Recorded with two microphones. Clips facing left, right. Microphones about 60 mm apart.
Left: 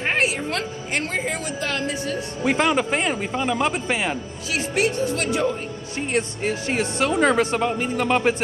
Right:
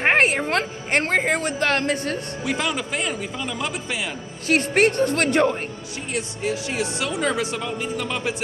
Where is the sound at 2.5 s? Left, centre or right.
Left.